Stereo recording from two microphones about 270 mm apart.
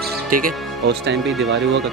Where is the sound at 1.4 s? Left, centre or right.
Right.